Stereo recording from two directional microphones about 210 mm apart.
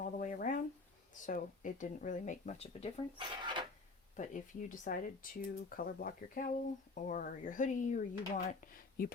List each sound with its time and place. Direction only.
0.0 s a sound: 40° left (ahead or behind)
1.1 s speech: 40° left (ahead or behind)
3.2 s speech: 20° right (ahead or behind)
4.2 s speech: 40° left (ahead or behind)